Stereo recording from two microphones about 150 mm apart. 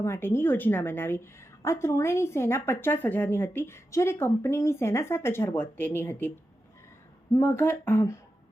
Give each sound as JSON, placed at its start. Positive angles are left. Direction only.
{"t": 0.0, "sound": "a woman's voice", "side_deg": 15}
{"t": 7.3, "sound": "a woman's voice", "side_deg": 15}